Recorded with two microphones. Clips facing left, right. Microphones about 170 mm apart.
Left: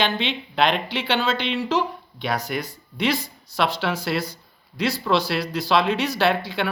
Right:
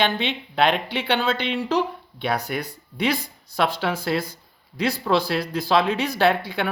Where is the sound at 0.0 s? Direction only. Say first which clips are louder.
Right 1 dB; 55° right (ahead or behind).